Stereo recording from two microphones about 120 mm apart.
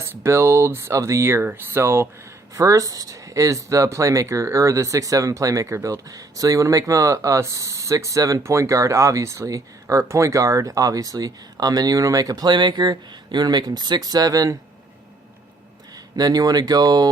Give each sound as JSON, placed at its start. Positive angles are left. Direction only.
{"t": 0.0, "sound": "speech", "side_deg": -20}
{"t": 16.1, "sound": "speech", "side_deg": -35}